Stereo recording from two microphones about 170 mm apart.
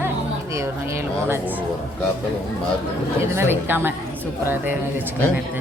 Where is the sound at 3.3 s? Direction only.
15° right (ahead or behind).